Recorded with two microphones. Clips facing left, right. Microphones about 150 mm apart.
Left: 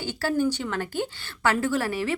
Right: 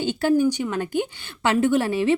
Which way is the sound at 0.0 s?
20° right (ahead or behind).